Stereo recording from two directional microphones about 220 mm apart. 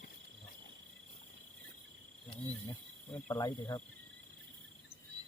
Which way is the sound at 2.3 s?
25° left (ahead or behind).